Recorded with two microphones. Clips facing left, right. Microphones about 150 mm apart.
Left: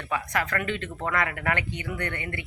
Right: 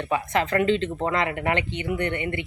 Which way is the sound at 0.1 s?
25° right (ahead or behind).